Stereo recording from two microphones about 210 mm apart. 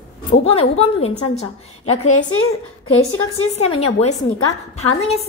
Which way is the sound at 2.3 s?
75° left (ahead or behind).